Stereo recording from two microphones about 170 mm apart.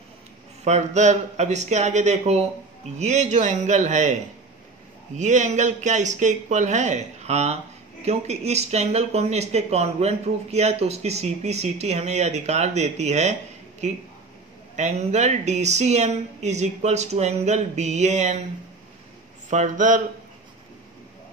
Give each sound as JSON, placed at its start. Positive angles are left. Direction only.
{"t": 0.7, "sound": "speech", "side_deg": -40}
{"t": 19.5, "sound": "speech", "side_deg": -45}